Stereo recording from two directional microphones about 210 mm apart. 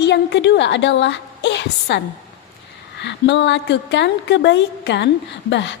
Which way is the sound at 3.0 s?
55° left (ahead or behind).